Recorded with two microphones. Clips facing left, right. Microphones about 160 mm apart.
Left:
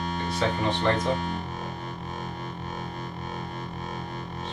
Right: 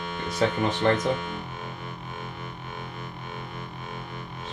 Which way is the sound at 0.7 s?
40° left (ahead or behind).